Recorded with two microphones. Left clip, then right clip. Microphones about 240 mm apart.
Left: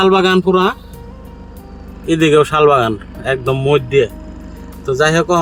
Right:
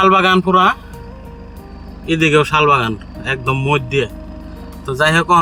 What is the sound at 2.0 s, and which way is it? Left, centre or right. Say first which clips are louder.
Speech: left 2 dB; centre.